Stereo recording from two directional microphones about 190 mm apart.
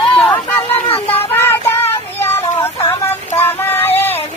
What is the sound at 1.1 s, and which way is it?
Child singing, 10° left (ahead or behind).